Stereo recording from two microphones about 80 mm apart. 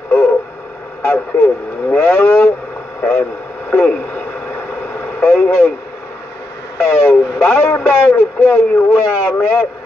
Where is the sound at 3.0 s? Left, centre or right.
Left.